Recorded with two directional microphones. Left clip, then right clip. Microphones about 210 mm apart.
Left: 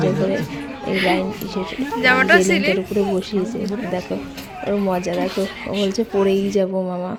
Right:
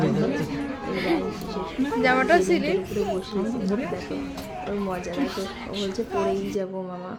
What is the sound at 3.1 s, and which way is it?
Speech, 30° left (ahead or behind).